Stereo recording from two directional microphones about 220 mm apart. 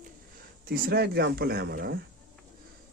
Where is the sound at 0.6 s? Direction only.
45° right (ahead or behind).